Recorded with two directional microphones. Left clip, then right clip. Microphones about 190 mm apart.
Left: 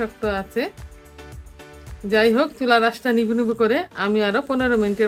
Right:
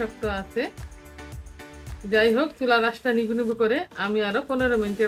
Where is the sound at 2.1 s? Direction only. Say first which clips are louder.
Left 3 dB; 55° left (ahead or behind).